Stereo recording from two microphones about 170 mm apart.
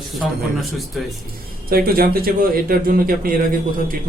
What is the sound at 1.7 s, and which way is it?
A man's voice, 60° right (ahead or behind).